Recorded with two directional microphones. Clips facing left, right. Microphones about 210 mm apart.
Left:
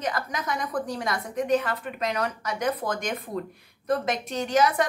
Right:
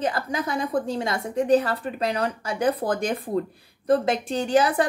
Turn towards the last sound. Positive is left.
turn(degrees=-30)  # may be behind; listen again after turning